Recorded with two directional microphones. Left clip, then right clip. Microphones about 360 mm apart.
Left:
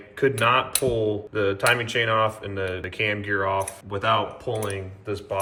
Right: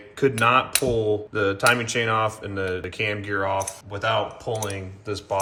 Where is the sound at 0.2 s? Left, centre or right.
Centre.